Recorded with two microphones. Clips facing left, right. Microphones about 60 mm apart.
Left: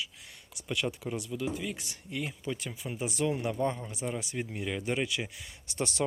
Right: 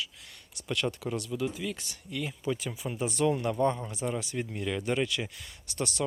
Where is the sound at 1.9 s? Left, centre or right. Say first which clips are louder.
Even; left.